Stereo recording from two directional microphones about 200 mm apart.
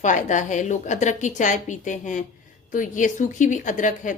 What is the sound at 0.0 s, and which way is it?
A woman's voice, 40° left (ahead or behind).